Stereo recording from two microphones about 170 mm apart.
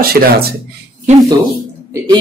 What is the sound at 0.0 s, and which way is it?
Speech, 65° right (ahead or behind).